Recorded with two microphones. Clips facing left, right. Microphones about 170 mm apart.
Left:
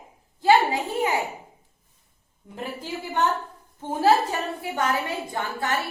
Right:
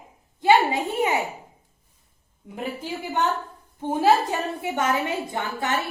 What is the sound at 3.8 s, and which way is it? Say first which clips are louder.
A woman's voice: right 1 dB; 20° right (ahead or behind).